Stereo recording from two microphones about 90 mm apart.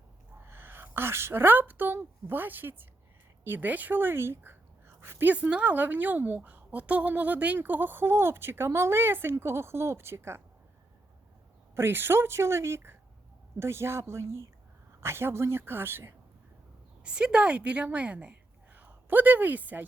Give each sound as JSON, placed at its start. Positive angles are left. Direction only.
{"t": 0.4, "sound": "a woman's voice", "side_deg": -25}
{"t": 11.7, "sound": "speech", "side_deg": -25}
{"t": 17.0, "sound": "a woman's voice", "side_deg": -10}